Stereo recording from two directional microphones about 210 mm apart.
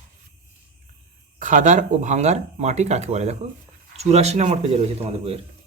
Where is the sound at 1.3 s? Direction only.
35° right (ahead or behind).